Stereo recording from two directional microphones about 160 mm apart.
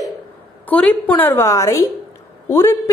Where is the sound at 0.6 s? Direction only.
10° left (ahead or behind).